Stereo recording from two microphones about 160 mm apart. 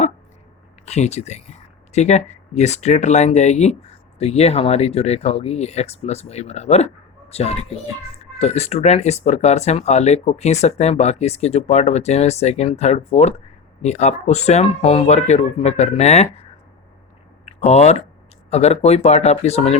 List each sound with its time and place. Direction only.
0.9 s speech: 45° left (ahead or behind)
17.4 s a sound: 40° left (ahead or behind)
18.5 s speech: 40° left (ahead or behind)